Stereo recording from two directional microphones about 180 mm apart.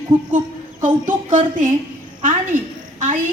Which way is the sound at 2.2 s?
45° right (ahead or behind).